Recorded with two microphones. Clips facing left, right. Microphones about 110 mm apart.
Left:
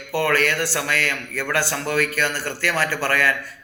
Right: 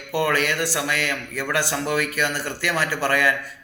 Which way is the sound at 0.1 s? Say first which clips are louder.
Left 1 dB; 20° right (ahead or behind).